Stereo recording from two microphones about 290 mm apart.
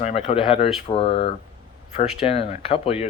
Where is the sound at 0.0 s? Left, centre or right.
Centre.